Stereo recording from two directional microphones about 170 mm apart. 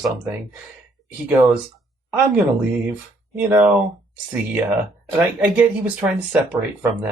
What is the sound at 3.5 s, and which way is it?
Speech, 10° right (ahead or behind).